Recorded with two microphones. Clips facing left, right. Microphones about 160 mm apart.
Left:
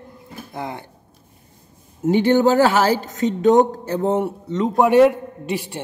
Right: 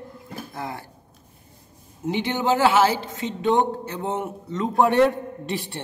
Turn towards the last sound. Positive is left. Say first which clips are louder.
# left 4 dB
turn(degrees=10)  # may be behind; listen again after turning